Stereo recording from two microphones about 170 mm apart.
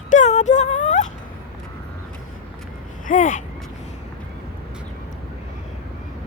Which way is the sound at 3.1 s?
50° left (ahead or behind).